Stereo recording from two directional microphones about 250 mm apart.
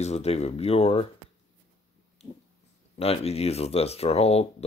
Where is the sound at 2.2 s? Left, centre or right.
Left.